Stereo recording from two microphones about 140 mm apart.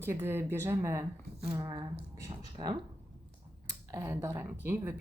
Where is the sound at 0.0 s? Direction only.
15° right (ahead or behind).